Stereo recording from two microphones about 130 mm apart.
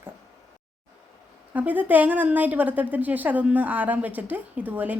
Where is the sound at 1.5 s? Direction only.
15° right (ahead or behind).